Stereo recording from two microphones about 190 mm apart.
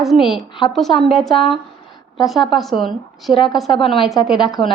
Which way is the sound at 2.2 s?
Centre (ahead or behind).